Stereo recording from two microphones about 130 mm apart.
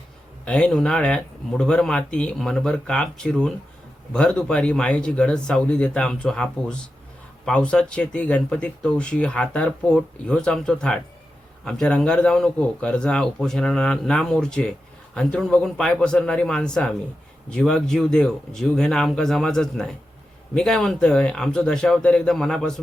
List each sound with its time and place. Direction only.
0.4 s a man's voice: 5° left (ahead or behind)